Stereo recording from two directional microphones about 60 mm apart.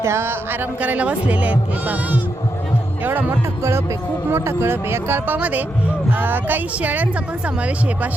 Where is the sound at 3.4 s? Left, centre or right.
Right.